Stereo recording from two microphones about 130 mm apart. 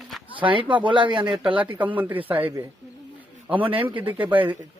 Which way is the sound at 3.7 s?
40° right (ahead or behind).